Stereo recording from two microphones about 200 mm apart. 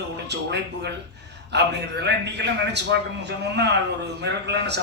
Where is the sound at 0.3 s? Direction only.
55° right (ahead or behind).